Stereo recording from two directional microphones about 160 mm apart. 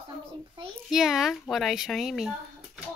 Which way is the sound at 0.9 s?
5° right (ahead or behind).